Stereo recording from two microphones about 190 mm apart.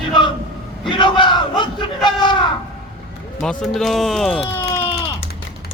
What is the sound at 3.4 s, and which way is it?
Speech, centre (ahead or behind).